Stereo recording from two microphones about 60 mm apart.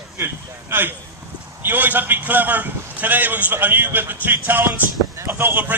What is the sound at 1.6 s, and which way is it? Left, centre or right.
A man's voice, right.